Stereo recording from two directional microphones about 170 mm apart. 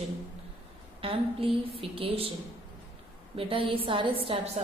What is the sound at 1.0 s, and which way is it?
A woman's voice, 35° right (ahead or behind).